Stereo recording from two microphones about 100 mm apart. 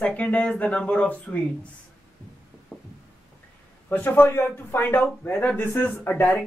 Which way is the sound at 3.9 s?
20° left (ahead or behind).